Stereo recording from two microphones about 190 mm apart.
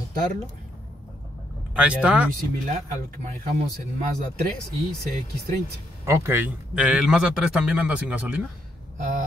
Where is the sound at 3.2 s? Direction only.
40° right (ahead or behind).